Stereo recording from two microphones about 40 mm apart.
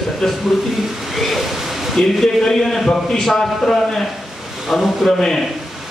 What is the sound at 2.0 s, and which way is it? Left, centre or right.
Speech, left.